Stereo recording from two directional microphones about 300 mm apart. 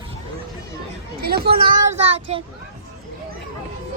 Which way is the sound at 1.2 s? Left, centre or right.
Right.